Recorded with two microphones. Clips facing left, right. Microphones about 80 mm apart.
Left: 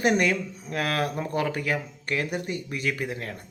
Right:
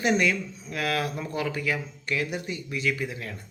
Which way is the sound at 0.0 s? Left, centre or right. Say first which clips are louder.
Left 1 dB; left.